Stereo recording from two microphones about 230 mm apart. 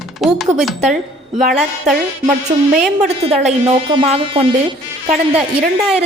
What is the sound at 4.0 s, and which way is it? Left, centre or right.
Speech, right.